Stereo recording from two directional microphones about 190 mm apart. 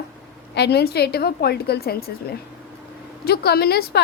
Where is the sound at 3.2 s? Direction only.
55° left (ahead or behind).